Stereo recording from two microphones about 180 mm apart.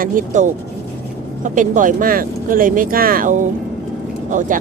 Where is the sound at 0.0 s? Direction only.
50° right (ahead or behind).